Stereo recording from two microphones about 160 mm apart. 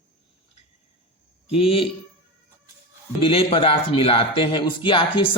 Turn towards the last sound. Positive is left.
turn(degrees=30)  # may be behind; listen again after turning